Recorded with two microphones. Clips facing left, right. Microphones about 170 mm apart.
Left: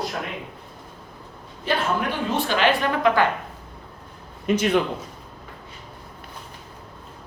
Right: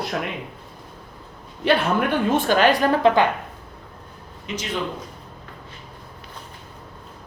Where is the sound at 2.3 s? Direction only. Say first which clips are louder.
Right 3 dB; 50° right (ahead or behind).